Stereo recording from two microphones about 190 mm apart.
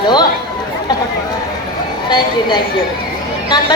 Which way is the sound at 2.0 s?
25° left (ahead or behind).